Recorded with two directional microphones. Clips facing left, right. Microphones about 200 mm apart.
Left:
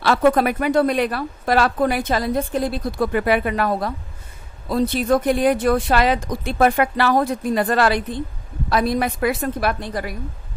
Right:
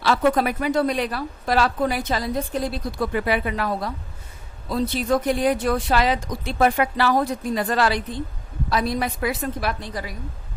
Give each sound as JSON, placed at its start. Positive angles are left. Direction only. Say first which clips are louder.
{"t": 0.0, "sound": "a woman's voice", "louder": "left 3 dB", "side_deg": 55}